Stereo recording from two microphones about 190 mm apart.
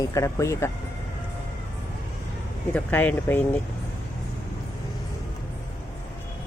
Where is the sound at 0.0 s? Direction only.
15° left (ahead or behind).